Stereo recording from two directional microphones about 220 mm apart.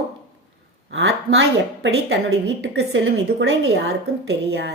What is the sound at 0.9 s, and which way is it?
A woman's voice, 60° right (ahead or behind).